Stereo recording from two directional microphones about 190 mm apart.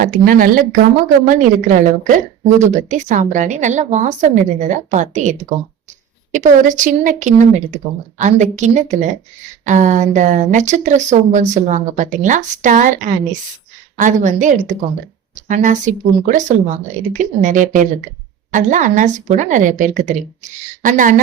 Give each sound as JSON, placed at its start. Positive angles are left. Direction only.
{"t": 0.0, "sound": "a woman's voice", "side_deg": -50}